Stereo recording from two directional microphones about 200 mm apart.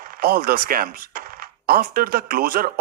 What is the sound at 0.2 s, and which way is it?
Speech, 50° right (ahead or behind).